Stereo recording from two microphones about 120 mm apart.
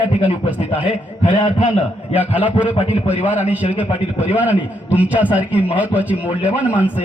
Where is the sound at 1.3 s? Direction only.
40° left (ahead or behind).